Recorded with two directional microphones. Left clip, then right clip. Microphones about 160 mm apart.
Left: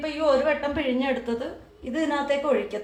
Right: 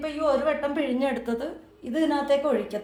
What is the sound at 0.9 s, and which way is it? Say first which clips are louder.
Speech: left 1 dB; 55° right (ahead or behind).